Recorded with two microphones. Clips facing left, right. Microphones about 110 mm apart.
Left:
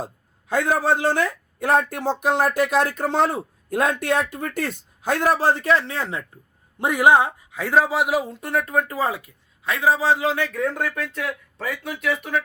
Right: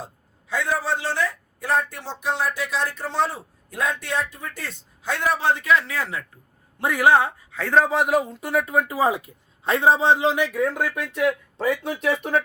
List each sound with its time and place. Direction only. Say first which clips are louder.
0.0 s a man's voice: left 6 dB; 50° left (ahead or behind); by 9.3 s 20° right (ahead or behind)
9.6 s a man's voice: right 2 dB; 30° right (ahead or behind)